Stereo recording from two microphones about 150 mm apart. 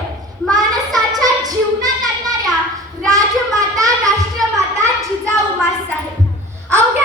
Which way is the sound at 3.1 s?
25° right (ahead or behind).